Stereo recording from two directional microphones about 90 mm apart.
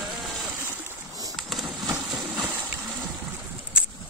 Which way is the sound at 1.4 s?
Centre (ahead or behind).